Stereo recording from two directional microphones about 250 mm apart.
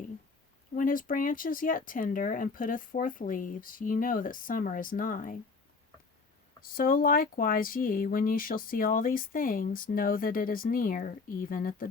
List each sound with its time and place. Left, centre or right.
0.8 s speech: left
6.6 s speech: left